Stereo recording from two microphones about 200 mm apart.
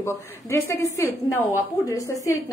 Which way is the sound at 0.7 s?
15° left (ahead or behind).